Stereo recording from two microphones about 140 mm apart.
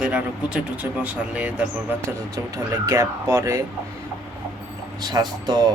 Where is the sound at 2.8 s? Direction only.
20° right (ahead or behind).